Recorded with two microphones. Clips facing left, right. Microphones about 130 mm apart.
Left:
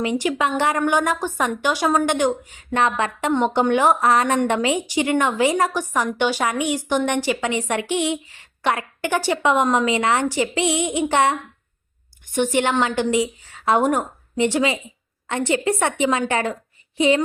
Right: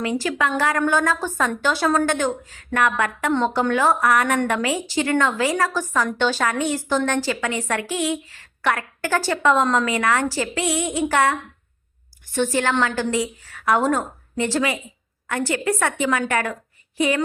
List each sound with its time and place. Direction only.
0.0 s a woman's voice: 20° left (ahead or behind)